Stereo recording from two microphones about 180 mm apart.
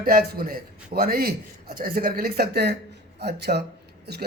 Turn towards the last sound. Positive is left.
turn(degrees=-65)  # may be behind; listen again after turning